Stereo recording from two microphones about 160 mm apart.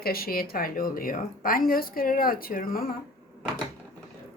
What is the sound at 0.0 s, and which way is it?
A woman's voice, 70° left (ahead or behind).